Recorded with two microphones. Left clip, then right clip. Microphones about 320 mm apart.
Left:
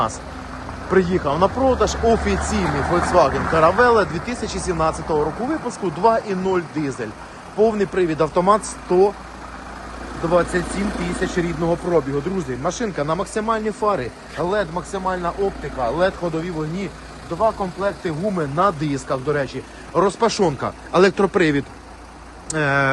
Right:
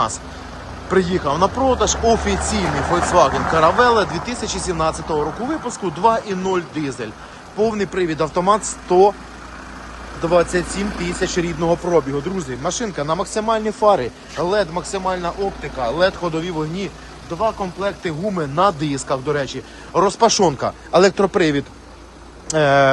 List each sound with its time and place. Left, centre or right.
0.9 s speech: centre
2.6 s speech: right
3.1 s speech: centre
10.2 s speech: centre